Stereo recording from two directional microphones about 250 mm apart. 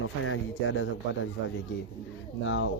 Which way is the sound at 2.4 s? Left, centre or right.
Left.